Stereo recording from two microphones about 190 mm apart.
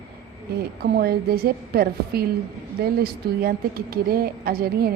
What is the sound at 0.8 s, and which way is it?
A woman's voice, 55° right (ahead or behind).